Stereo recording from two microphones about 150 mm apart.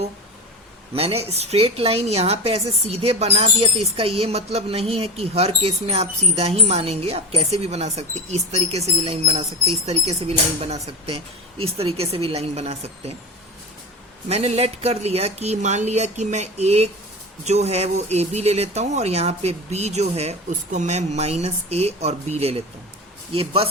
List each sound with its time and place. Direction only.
0.9 s a woman's voice: 40° right (ahead or behind)
14.3 s a woman's voice: 45° right (ahead or behind)